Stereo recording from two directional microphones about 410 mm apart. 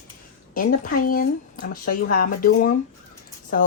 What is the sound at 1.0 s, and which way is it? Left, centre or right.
Speech, left.